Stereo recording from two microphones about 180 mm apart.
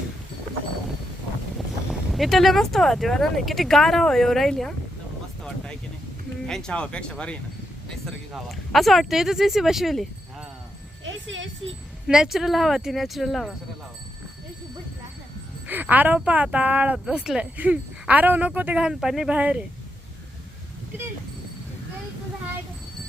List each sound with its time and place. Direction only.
1.9 s speech: centre (ahead or behind)
6.5 s speech: 5° left (ahead or behind)
11.0 s a sound: 90° right
12.0 s speech: 5° right (ahead or behind)
15.6 s speech: 10° right (ahead or behind)